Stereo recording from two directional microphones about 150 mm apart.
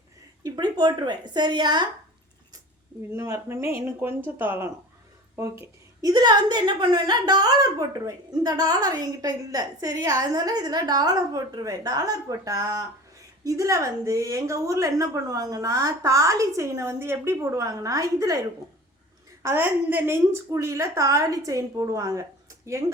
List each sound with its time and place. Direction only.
0.4 s a woman's voice: 30° right (ahead or behind)
3.1 s a woman's voice: 20° right (ahead or behind)
19.4 s a woman's voice: 15° right (ahead or behind)